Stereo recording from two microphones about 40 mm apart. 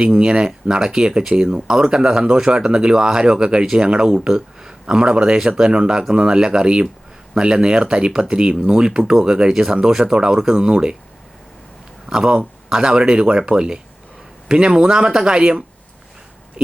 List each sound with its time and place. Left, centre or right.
0.0 s speech: right
12.0 s speech: centre